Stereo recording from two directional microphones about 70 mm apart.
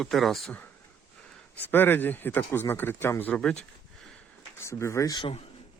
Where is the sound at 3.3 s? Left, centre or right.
Centre.